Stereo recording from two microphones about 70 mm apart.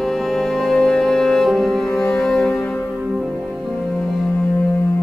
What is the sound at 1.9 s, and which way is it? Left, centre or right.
Music, left.